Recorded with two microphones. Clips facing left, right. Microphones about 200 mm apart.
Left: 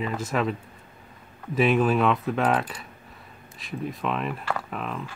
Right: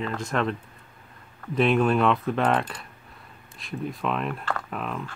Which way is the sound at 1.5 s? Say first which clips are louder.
Even; 5° left (ahead or behind).